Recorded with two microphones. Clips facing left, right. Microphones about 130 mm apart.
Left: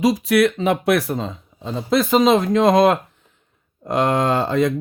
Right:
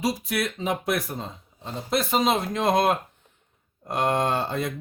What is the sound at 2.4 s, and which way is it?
Speech, 90° left.